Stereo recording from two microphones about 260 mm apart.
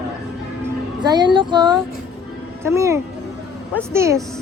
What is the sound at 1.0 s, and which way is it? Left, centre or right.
Child singing, centre.